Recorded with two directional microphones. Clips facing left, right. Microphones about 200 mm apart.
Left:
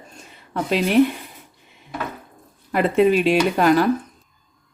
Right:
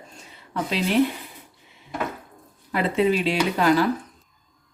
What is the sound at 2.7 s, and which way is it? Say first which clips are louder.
Speech: left 5 dB; 55° left (ahead or behind).